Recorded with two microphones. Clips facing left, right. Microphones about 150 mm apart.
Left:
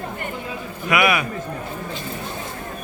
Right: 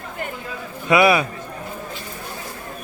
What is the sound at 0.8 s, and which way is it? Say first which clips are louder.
Speech: right 4 dB; 30° right (ahead or behind).